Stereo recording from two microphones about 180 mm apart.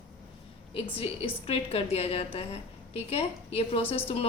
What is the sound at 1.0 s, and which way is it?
A woman's voice, 30° left (ahead or behind).